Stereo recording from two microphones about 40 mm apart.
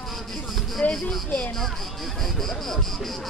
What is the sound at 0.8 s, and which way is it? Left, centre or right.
Speech, left.